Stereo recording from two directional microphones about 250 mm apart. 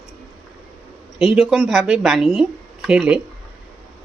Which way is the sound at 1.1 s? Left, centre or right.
Centre.